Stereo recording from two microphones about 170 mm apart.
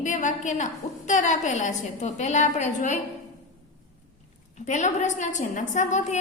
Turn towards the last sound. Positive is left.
turn(degrees=45)  # may be behind; listen again after turning